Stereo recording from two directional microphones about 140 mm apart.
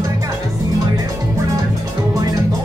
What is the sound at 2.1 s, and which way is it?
Music, 25° right (ahead or behind).